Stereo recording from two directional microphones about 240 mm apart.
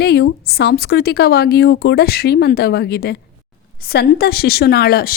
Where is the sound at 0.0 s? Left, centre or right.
Left.